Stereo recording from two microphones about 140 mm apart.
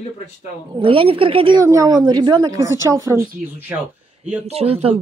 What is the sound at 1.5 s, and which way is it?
A woman's voice, 25° right (ahead or behind).